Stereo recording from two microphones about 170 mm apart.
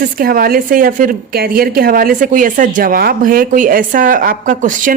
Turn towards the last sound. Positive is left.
turn(degrees=-50)  # may be behind; listen again after turning